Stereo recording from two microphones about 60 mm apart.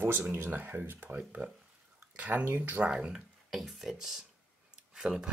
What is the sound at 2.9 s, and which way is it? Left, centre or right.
Speech, centre.